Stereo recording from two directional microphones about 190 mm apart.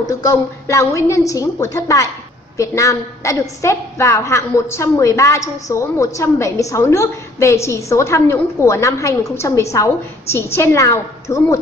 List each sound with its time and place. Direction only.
0.1 s a woman's voice: 15° left (ahead or behind)